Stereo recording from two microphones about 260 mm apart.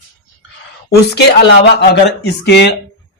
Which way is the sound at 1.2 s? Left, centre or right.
Left.